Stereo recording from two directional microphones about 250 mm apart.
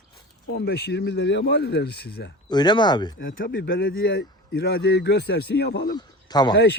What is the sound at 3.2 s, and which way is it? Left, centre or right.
A man's voice, left.